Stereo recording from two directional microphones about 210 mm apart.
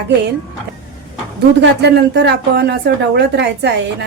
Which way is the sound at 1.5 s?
55° right (ahead or behind).